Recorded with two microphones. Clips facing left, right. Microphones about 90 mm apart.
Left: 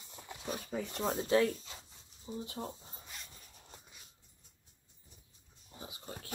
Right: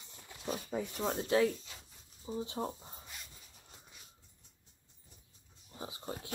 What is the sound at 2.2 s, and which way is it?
Speech, 25° right (ahead or behind).